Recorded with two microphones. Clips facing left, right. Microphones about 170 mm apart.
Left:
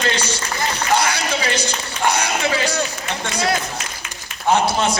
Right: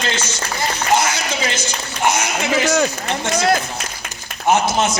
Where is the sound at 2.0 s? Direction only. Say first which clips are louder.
Right 1 dB; 20° right (ahead or behind).